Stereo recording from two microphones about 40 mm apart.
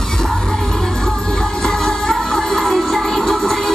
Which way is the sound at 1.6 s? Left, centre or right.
Centre.